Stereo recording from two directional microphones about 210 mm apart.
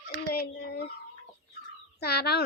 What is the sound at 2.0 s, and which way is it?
Speech, 50° left (ahead or behind).